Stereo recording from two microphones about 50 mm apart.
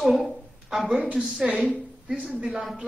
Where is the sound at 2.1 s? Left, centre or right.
Centre.